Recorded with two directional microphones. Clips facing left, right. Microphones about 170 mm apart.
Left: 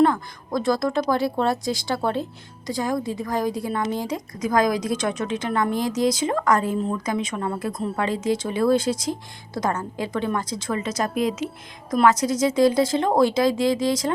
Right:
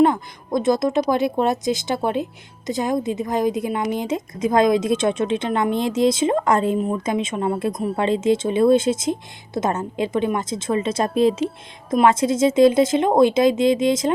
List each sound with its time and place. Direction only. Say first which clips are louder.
0.0 s a woman's voice: right 2 dB; 20° right (ahead or behind)